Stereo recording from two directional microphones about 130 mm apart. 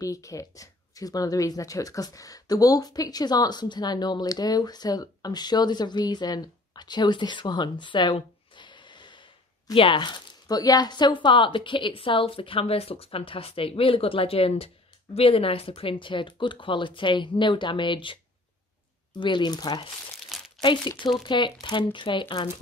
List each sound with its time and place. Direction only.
0.0 s speech: 25° left (ahead or behind)
20.2 s crumpling: centre (ahead or behind)
20.6 s speech: 35° left (ahead or behind)